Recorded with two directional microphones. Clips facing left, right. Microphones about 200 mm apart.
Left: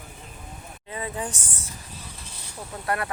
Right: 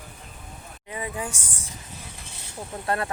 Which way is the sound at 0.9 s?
15° right (ahead or behind).